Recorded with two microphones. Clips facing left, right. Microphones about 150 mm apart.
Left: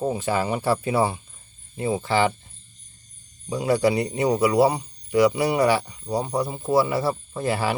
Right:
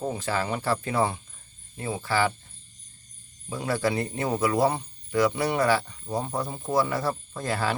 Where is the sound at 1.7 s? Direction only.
15° left (ahead or behind).